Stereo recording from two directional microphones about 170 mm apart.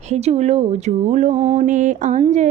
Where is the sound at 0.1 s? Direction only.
40° right (ahead or behind).